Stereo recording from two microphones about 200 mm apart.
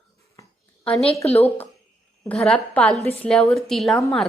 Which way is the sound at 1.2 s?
30° left (ahead or behind).